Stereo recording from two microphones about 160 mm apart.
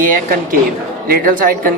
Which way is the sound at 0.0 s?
60° right (ahead or behind).